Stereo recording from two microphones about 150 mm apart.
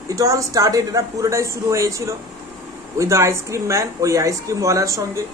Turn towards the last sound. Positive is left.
turn(degrees=-20)  # may be behind; listen again after turning